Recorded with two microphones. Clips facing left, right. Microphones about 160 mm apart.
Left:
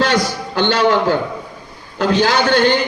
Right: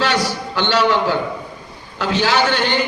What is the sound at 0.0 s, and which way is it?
A man's voice, 45° left (ahead or behind).